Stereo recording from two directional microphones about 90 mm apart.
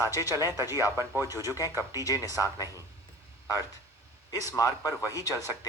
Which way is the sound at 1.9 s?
40° left (ahead or behind).